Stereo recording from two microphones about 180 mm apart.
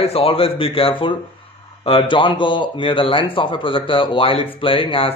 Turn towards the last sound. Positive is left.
turn(degrees=30)  # may be behind; listen again after turning